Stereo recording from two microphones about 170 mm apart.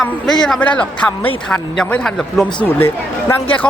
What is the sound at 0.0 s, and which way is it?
Speech, centre (ahead or behind).